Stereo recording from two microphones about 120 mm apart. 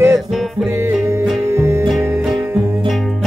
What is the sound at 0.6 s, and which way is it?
Music, 20° right (ahead or behind).